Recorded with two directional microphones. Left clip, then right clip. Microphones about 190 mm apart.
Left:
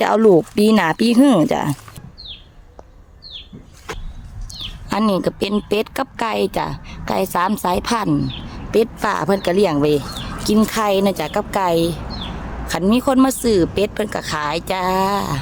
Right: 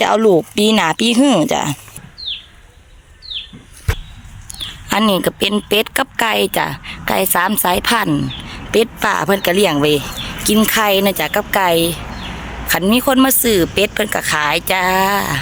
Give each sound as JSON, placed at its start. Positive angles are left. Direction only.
{"t": 0.0, "sound": "speech", "side_deg": 20}
{"t": 4.9, "sound": "a woman's voice", "side_deg": 0}